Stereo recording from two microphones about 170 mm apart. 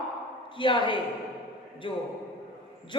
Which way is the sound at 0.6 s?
30° left (ahead or behind).